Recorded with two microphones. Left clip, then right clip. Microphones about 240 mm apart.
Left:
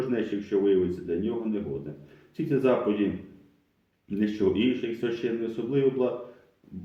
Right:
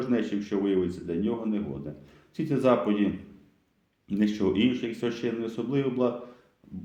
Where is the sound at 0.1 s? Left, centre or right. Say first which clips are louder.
Right 1 dB; right.